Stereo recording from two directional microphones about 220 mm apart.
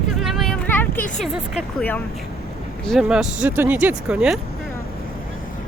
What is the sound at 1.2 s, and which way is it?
Speech, 5° left (ahead or behind).